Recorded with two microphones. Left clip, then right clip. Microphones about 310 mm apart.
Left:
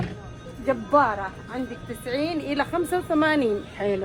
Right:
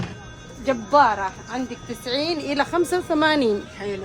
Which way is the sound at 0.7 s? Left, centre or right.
Right.